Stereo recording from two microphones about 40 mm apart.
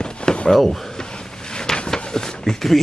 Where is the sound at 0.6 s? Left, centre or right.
Centre.